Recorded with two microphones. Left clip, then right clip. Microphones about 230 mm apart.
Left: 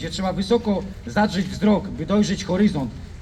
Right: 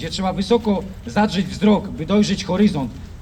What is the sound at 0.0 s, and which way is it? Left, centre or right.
A man's voice, right.